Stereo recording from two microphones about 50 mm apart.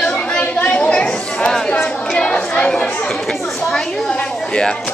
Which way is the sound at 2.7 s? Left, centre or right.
Centre.